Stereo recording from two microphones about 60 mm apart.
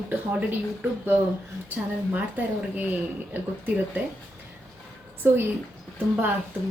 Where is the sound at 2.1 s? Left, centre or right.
Right.